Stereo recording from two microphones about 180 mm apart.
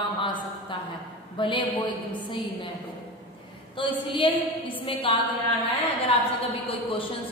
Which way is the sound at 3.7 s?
30° left (ahead or behind).